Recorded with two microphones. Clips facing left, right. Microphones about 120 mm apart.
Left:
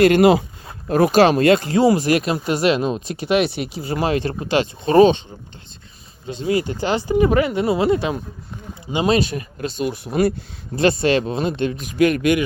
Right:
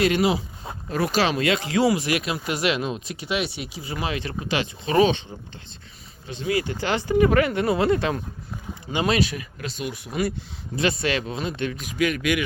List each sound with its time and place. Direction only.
0.0 s speech: 55° left (ahead or behind)
3.8 s speech: 40° left (ahead or behind)
6.2 s speech: 30° left (ahead or behind); by 8.2 s 15° left (ahead or behind)
9.0 s speech: 30° left (ahead or behind)
11.9 s speech: 50° left (ahead or behind)